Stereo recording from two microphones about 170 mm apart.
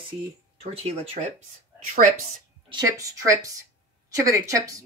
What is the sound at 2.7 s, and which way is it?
Speech, 20° right (ahead or behind).